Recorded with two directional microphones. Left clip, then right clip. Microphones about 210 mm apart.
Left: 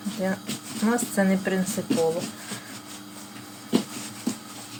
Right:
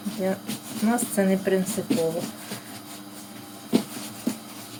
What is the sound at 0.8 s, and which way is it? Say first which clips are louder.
Speech: even; 20° left (ahead or behind).